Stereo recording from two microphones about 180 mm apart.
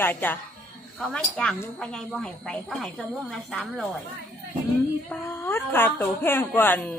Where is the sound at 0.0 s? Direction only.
10° left (ahead or behind).